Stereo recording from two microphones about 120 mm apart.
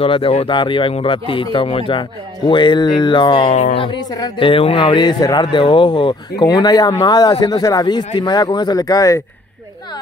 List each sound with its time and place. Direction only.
0.0 s speech: 50° left (ahead or behind); by 9.2 s 30° left (ahead or behind)